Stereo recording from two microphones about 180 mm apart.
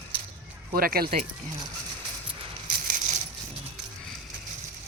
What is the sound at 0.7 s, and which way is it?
Speech, 55° right (ahead or behind).